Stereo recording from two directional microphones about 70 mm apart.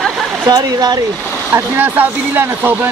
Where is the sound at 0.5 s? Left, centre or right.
Right.